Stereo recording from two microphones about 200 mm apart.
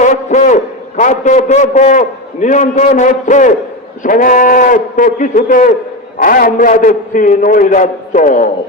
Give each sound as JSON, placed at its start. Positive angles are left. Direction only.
{"t": 0.0, "sound": "a man's voice", "side_deg": 35}